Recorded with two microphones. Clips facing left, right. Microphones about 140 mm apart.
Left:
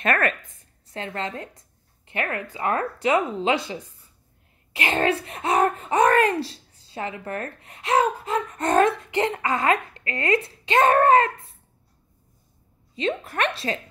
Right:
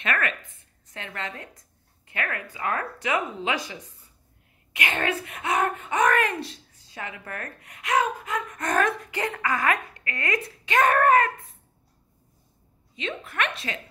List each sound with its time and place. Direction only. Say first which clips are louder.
0.0 s a woman's voice: left 5 dB; 45° left (ahead or behind); by 11.5 s 25° left (ahead or behind)
12.9 s a woman's voice: left 6 dB; 35° left (ahead or behind)